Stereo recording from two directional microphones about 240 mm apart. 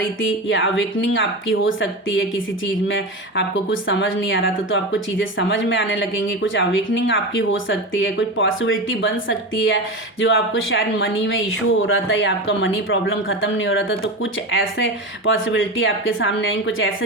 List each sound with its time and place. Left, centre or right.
0.2 s a woman's voice: left